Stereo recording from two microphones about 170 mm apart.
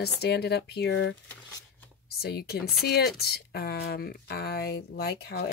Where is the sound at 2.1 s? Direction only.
65° left (ahead or behind).